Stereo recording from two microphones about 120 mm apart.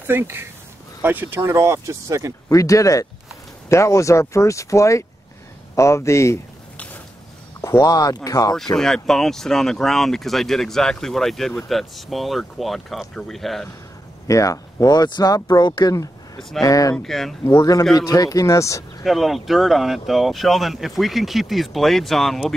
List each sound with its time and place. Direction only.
0.0 s speech: 20° right (ahead or behind)
2.5 s speech: 25° left (ahead or behind)
7.6 s speech: 30° left (ahead or behind)
8.7 s speech: 5° left (ahead or behind)
14.2 s speech: 30° left (ahead or behind)
16.3 s speech: centre (ahead or behind)
16.6 s speech: 30° left (ahead or behind)
16.9 s speech: 5° left (ahead or behind)
17.6 s speech: 30° left (ahead or behind)
19.0 s speech: centre (ahead or behind)